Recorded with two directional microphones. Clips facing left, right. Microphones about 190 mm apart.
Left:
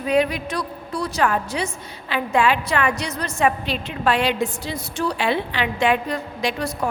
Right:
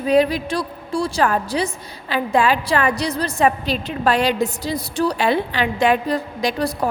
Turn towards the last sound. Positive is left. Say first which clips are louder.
# right 3 dB
turn(degrees=-35)  # may be behind; listen again after turning